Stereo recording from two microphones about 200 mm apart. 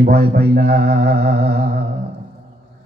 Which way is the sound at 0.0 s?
50° right (ahead or behind).